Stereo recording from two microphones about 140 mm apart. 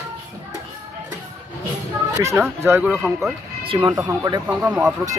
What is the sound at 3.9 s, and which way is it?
Speech, 25° right (ahead or behind).